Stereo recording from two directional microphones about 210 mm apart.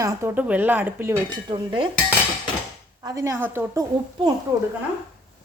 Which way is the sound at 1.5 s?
20° right (ahead or behind).